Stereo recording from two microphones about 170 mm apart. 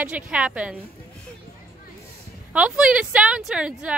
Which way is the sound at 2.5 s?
10° right (ahead or behind).